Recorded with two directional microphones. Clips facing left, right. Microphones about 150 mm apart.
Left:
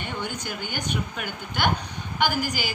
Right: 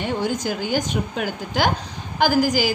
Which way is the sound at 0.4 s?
90° right.